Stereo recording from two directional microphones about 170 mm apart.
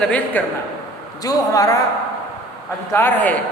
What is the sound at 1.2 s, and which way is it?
Speech, 20° left (ahead or behind).